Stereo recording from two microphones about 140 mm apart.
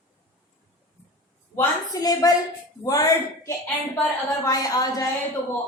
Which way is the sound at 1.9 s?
25° left (ahead or behind).